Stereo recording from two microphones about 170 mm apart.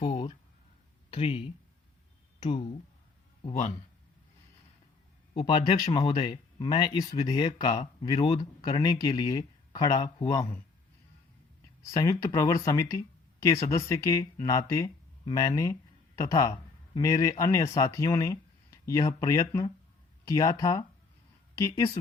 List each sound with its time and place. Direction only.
0.1 s a sound: 40° left (ahead or behind)
1.1 s speech: 35° left (ahead or behind)
3.4 s speech: 40° left (ahead or behind)
5.3 s speech: 30° left (ahead or behind)
11.9 s speech: 20° left (ahead or behind)